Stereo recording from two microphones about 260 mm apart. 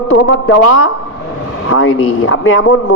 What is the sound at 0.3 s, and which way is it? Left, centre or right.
A man's voice, left.